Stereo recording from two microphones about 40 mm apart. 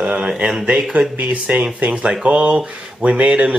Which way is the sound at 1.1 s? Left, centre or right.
Right.